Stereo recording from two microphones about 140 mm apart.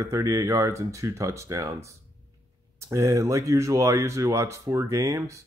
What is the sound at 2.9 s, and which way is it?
Speech, 20° right (ahead or behind).